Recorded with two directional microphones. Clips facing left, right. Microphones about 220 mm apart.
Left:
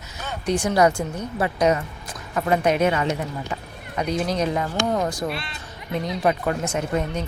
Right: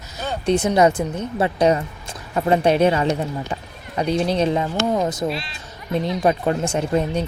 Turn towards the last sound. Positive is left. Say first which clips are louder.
# right 4 dB
turn(degrees=-30)  # may be behind; listen again after turning